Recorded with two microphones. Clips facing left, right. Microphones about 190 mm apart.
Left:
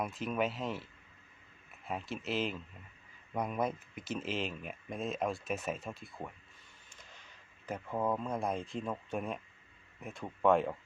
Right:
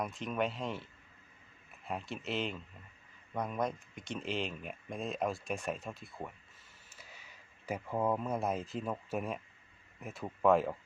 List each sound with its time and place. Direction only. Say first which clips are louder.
0.0 s speech: left 1 dB; 5° left (ahead or behind)